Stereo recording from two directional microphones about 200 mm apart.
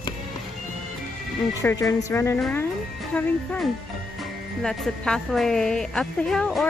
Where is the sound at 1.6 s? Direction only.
15° left (ahead or behind).